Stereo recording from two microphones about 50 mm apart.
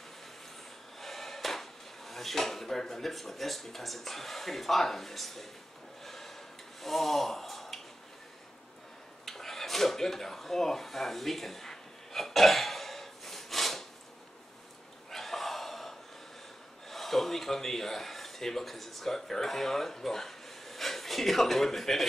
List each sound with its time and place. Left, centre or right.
0.9 s speech: centre
6.0 s gasp: centre
9.2 s a sound: centre
15.0 s gasp: centre
16.9 s speech: centre